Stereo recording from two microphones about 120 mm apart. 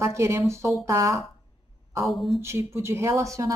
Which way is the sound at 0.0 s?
25° right (ahead or behind).